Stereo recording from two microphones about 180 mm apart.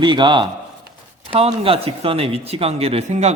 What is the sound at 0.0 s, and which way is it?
A man's voice, 25° right (ahead or behind).